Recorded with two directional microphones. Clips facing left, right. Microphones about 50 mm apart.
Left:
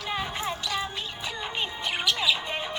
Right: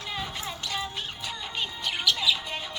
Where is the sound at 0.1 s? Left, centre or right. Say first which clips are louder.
Left 4 dB; left.